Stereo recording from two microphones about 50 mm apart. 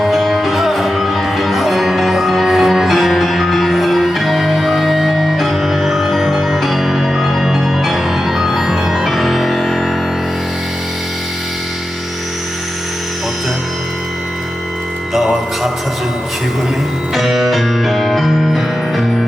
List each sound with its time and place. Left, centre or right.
0.0 s music: centre
15.1 s music: centre
17.2 s music: centre